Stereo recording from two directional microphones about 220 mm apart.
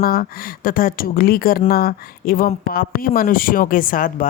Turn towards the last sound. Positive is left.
turn(degrees=40)  # may be behind; listen again after turning